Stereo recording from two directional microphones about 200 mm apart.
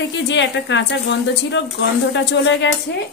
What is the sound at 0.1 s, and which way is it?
A woman's voice, 65° left (ahead or behind).